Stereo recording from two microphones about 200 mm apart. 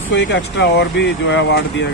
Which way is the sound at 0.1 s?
60° left (ahead or behind).